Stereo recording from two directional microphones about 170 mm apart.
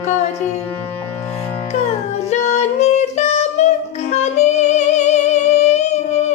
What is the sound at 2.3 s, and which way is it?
Music, 45° left (ahead or behind).